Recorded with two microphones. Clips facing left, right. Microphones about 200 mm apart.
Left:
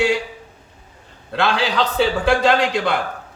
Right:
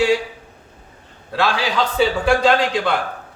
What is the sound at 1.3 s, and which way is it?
Speech, centre (ahead or behind).